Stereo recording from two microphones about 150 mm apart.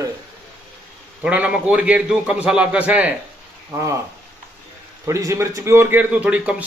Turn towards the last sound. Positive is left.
turn(degrees=-10)  # may be behind; listen again after turning